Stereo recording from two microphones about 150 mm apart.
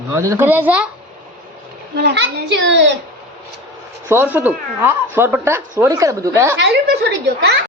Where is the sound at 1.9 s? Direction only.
90° right.